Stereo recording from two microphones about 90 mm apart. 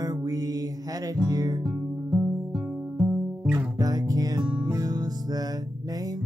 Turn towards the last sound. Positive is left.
turn(degrees=-45)  # may be behind; listen again after turning